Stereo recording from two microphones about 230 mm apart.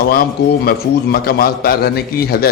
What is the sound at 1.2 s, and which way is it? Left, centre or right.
A man's voice, left.